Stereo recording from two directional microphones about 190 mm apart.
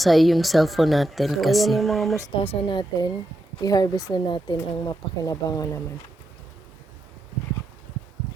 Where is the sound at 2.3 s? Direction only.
30° left (ahead or behind).